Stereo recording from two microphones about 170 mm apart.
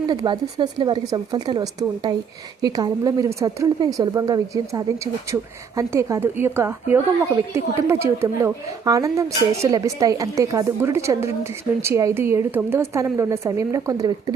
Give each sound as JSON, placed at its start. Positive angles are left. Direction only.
{"t": 0.1, "sound": "a woman's voice", "side_deg": -25}